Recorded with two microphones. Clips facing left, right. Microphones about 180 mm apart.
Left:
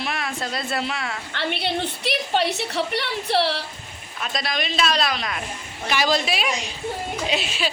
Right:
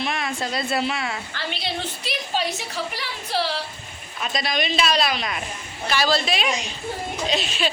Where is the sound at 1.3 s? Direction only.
60° left (ahead or behind).